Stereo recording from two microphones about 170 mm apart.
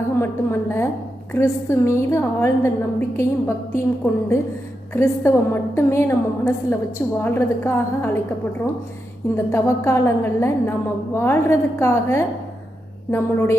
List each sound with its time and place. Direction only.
0.2 s a woman's voice: 15° left (ahead or behind)
9.3 s a woman's voice: 15° left (ahead or behind)